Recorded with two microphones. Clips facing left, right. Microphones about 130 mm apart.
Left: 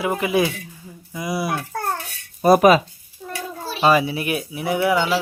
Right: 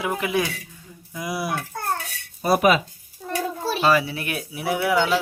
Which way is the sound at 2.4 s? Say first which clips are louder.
Left 5 dB; 45° left (ahead or behind).